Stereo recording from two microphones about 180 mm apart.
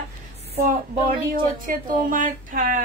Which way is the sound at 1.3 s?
50° right (ahead or behind).